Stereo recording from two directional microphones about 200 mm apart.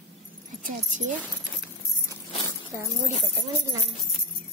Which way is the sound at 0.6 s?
40° right (ahead or behind).